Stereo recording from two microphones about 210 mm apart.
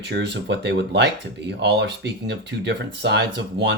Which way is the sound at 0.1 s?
55° right (ahead or behind).